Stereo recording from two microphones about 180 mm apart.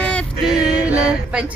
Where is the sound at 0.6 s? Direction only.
5° right (ahead or behind).